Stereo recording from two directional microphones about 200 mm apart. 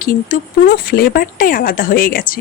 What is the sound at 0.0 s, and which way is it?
A woman's voice, 45° left (ahead or behind).